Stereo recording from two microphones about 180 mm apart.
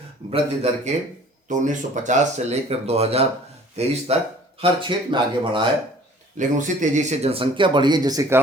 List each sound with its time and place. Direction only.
0.3 s speech: 35° right (ahead or behind)
6.6 s speech: 45° right (ahead or behind); by 8.4 s 20° right (ahead or behind)